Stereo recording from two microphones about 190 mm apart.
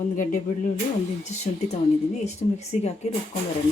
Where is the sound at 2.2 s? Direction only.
35° left (ahead or behind).